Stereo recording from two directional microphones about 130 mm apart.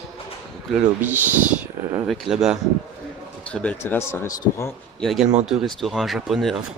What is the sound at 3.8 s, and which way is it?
Speech, 20° left (ahead or behind).